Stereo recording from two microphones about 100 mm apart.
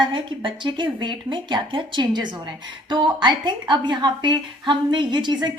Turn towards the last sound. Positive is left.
turn(degrees=-45)  # may be behind; listen again after turning